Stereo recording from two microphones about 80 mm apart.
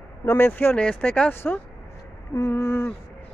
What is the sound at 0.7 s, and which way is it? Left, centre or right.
Speech, centre.